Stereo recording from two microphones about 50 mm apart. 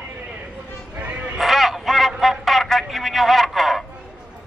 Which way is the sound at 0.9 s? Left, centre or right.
Right.